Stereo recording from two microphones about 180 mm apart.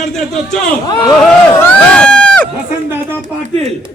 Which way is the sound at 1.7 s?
5° left (ahead or behind).